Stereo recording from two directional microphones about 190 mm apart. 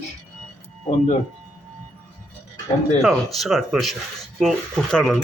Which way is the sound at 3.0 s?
Centre (ahead or behind).